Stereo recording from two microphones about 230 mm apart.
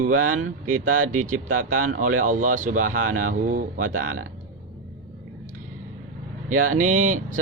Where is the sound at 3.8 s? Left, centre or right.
Right.